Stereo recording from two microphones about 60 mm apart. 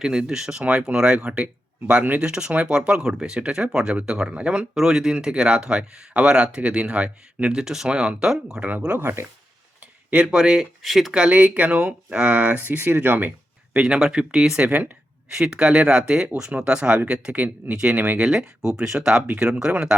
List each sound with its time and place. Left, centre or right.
0.0 s speech: centre
7.6 s speech: centre
8.6 s speech: right
10.1 s speech: centre
11.1 s speech: centre
13.7 s speech: centre
14.7 s speech: right
15.3 s speech: centre
17.9 s speech: right
18.3 s speech: centre